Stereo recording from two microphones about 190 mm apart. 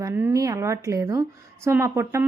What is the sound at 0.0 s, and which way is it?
Speech, 15° right (ahead or behind).